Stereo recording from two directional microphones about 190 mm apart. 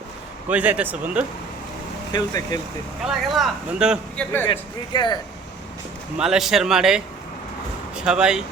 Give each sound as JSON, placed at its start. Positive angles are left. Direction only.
{"t": 0.4, "sound": "speech", "side_deg": -10}
{"t": 2.1, "sound": "speech", "side_deg": 20}
{"t": 3.0, "sound": "speech", "side_deg": 0}
{"t": 4.2, "sound": "a man's voice", "side_deg": 10}
{"t": 4.9, "sound": "speech", "side_deg": 25}
{"t": 6.1, "sound": "speech", "side_deg": -5}